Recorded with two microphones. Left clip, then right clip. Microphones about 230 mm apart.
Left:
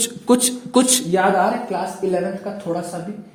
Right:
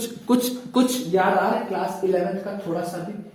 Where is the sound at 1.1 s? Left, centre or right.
Left.